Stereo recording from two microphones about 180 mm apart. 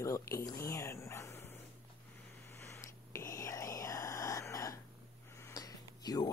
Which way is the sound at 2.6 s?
15° left (ahead or behind).